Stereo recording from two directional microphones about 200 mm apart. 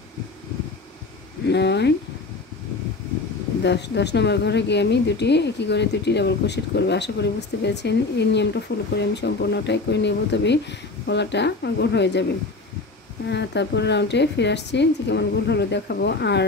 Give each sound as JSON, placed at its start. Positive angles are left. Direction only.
{"t": 1.5, "sound": "a woman's voice", "side_deg": 60}
{"t": 3.6, "sound": "a woman's voice", "side_deg": 60}
{"t": 13.3, "sound": "a woman's voice", "side_deg": 60}